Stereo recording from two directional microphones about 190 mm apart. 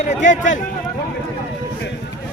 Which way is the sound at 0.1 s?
40° left (ahead or behind).